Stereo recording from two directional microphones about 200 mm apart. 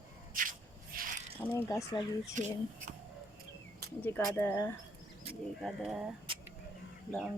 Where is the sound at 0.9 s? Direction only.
45° right (ahead or behind).